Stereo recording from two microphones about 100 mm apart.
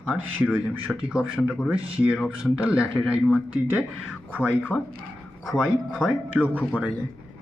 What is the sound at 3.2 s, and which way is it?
Speech, 20° left (ahead or behind).